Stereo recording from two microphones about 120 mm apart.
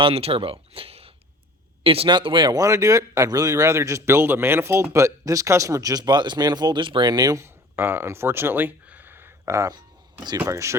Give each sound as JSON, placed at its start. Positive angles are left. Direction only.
{"t": 0.0, "sound": "speech", "side_deg": -55}